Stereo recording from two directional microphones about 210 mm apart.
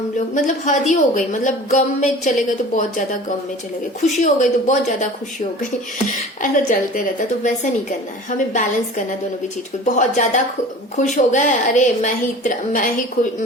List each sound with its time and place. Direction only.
0.4 s a woman's voice: 35° left (ahead or behind)
6.1 s a woman's voice: 40° left (ahead or behind)
8.3 s a woman's voice: 35° left (ahead or behind)